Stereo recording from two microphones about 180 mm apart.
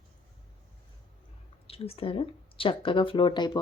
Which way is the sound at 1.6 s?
35° left (ahead or behind).